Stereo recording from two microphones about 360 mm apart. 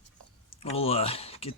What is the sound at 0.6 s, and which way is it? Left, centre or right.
Speech, centre.